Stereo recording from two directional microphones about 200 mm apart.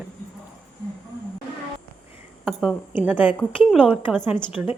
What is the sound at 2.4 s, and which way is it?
A woman's voice, centre (ahead or behind).